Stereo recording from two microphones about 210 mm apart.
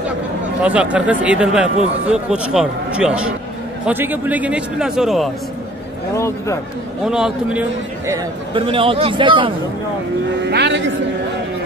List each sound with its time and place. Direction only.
0.6 s a man's voice: 5° right (ahead or behind)
6.1 s a man's voice: 15° left (ahead or behind)
7.1 s a man's voice: 5° right (ahead or behind)
8.1 s a man's voice: 25° right (ahead or behind)
10.4 s speech: 55° right (ahead or behind)